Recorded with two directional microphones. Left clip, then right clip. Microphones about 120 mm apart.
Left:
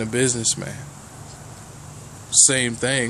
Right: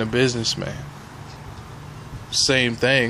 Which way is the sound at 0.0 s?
25° left (ahead or behind).